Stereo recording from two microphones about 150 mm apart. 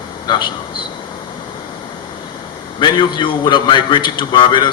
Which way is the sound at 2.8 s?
30° left (ahead or behind).